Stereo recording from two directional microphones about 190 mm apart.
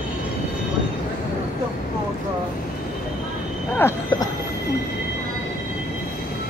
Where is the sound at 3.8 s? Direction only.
15° left (ahead or behind).